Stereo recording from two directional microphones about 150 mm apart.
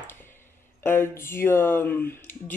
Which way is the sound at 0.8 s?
15° left (ahead or behind).